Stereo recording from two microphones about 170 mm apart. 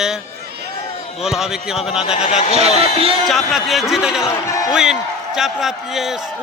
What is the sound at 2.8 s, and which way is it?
Speech, 35° right (ahead or behind).